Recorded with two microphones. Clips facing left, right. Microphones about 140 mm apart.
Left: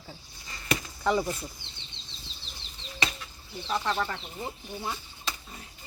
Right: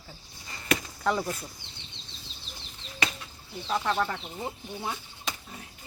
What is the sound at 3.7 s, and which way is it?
Speech, 5° right (ahead or behind).